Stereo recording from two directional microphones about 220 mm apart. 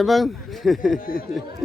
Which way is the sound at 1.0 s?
40° left (ahead or behind).